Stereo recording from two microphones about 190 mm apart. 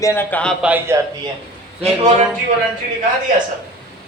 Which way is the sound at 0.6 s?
10° right (ahead or behind).